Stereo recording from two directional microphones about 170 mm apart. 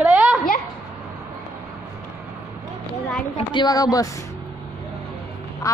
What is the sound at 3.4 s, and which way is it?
Speech, 25° left (ahead or behind).